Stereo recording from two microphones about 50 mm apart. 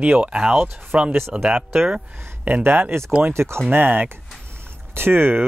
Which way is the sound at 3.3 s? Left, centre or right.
Right.